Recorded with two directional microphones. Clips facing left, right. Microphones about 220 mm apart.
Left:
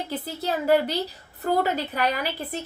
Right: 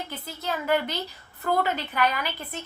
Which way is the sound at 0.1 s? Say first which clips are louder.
Left 5 dB; 35° left (ahead or behind).